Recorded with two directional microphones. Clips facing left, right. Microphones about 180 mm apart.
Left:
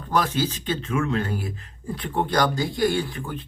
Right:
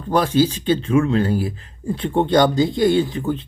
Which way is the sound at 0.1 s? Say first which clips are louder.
Right 7 dB; 30° right (ahead or behind).